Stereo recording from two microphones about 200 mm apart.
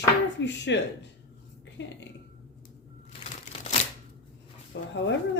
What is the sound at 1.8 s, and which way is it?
Speech, 60° left (ahead or behind).